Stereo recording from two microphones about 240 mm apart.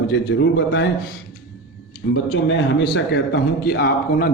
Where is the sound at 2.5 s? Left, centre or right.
Left.